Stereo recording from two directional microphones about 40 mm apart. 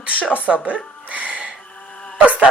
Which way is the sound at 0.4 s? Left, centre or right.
Right.